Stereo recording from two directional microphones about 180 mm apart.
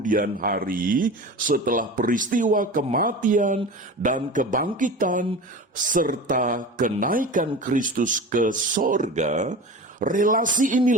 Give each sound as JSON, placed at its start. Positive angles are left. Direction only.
{"t": 0.0, "sound": "speech", "side_deg": -50}